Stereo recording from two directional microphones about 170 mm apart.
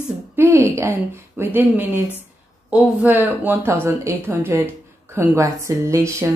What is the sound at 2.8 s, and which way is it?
A woman's voice, 10° right (ahead or behind).